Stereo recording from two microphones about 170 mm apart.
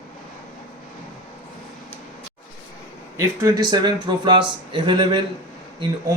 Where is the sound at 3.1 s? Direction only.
20° right (ahead or behind).